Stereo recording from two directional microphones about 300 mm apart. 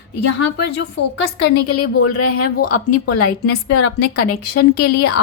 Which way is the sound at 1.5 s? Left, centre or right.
Left.